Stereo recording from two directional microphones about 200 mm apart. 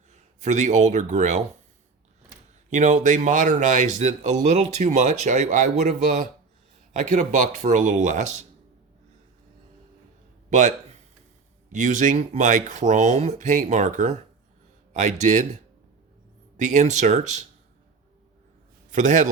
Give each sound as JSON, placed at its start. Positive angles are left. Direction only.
{"t": 0.1, "sound": "speech", "side_deg": -35}
{"t": 2.6, "sound": "speech", "side_deg": -35}
{"t": 10.5, "sound": "speech", "side_deg": -35}
{"t": 16.6, "sound": "speech", "side_deg": -35}
{"t": 18.9, "sound": "a man's voice", "side_deg": -40}